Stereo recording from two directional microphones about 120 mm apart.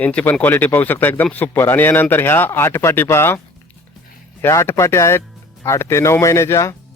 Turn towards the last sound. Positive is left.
turn(degrees=25)  # may be behind; listen again after turning